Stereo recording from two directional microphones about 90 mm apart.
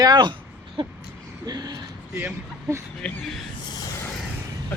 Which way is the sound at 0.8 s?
70° right (ahead or behind).